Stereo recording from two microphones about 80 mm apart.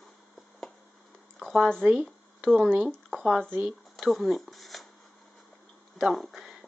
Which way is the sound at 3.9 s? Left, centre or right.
Centre.